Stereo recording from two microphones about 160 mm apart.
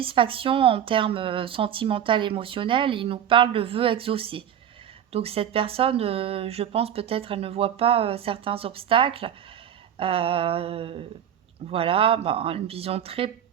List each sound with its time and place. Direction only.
0.0 s speech: 35° right (ahead or behind)